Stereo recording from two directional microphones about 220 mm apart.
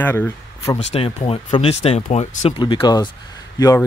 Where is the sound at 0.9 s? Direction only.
30° left (ahead or behind).